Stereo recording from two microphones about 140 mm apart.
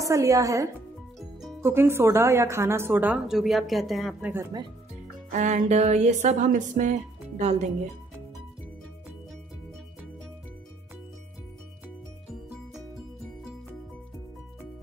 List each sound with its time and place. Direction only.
0.0 s a woman's voice: 25° right (ahead or behind)
3.3 s speech: centre (ahead or behind)
4.3 s speech: 15° right (ahead or behind)
5.3 s speech: 55° right (ahead or behind)